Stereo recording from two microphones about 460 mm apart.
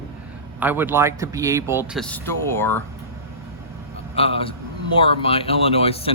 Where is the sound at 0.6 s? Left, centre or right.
Centre.